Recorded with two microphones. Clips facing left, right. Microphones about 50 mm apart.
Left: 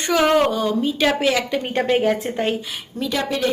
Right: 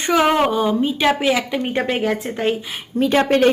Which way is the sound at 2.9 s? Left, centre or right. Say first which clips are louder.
Right 8 dB; right.